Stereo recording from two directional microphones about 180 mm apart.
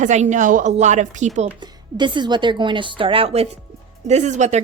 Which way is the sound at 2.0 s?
25° right (ahead or behind).